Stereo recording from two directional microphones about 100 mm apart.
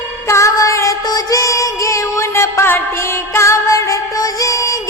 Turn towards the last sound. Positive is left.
turn(degrees=35)  # may be behind; listen again after turning